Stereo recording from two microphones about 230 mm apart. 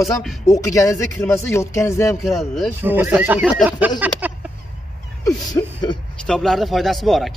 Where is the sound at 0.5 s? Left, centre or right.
Centre.